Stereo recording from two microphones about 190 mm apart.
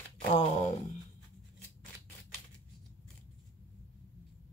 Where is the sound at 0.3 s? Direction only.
35° left (ahead or behind).